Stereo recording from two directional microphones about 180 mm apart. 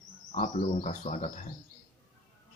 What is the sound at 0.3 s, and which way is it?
Speech, 40° left (ahead or behind).